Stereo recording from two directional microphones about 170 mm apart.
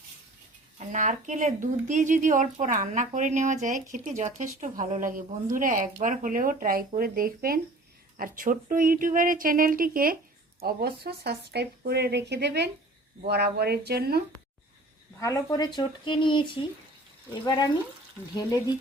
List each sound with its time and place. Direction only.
0.9 s speech: 45° right (ahead or behind); by 14.2 s 65° right (ahead or behind)
15.2 s speech: 20° left (ahead or behind)